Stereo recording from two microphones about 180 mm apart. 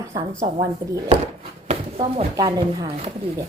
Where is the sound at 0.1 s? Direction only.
20° right (ahead or behind).